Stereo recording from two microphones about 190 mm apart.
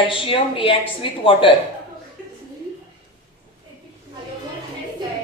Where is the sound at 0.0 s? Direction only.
25° left (ahead or behind).